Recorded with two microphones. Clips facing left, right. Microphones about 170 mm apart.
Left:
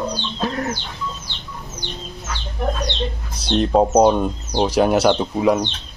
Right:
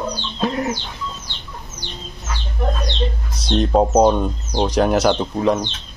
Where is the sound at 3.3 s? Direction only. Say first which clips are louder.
Even; centre (ahead or behind).